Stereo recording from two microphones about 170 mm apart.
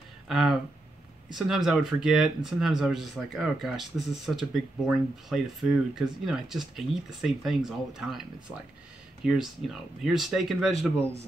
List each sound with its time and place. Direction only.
0.3 s speech: 5° right (ahead or behind)